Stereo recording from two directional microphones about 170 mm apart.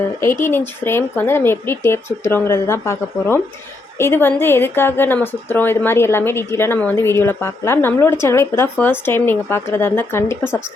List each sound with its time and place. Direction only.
0.2 s a woman's voice: 15° left (ahead or behind)